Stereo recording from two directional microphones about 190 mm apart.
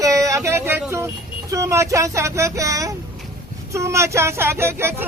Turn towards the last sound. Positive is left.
turn(degrees=-15)  # may be behind; listen again after turning